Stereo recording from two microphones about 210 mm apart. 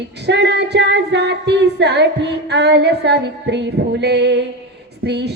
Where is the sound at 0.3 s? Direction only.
55° right (ahead or behind).